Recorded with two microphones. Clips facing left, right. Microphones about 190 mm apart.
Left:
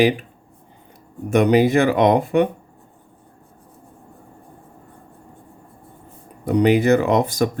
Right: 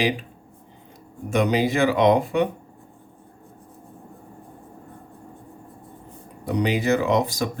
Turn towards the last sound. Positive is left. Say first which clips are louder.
# left 4 dB
turn(degrees=55)  # may be behind; listen again after turning